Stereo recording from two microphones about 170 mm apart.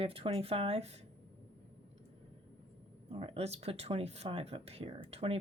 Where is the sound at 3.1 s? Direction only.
40° right (ahead or behind).